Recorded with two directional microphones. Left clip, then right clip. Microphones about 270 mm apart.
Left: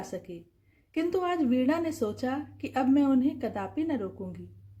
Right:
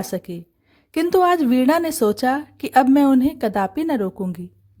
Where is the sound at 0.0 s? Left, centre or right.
Right.